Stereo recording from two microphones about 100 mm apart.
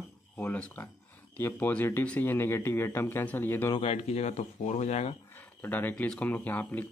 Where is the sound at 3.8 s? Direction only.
90° left.